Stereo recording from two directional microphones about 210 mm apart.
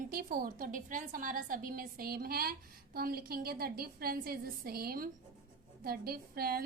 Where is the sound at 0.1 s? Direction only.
45° right (ahead or behind).